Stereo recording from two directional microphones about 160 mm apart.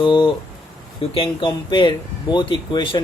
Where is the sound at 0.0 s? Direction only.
30° left (ahead or behind).